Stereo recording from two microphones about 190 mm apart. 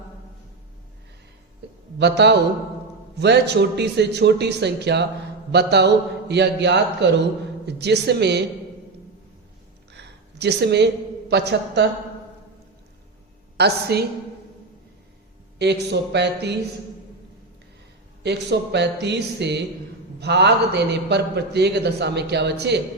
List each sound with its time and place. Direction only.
2.0 s a man's voice: 65° right (ahead or behind)
9.9 s a sound: 65° right (ahead or behind)
11.3 s a man's voice: 65° right (ahead or behind)
13.6 s a man's voice: 60° right (ahead or behind)
15.5 s a man's voice: 65° right (ahead or behind)
18.2 s a man's voice: 65° right (ahead or behind)